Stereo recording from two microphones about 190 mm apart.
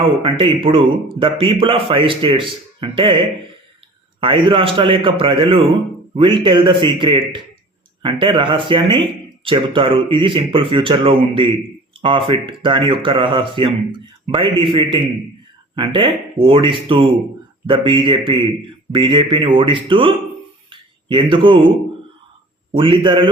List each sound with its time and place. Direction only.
0.0 s speech: 25° right (ahead or behind)
20.7 s a sound: 25° right (ahead or behind)
22.7 s speech: 25° right (ahead or behind)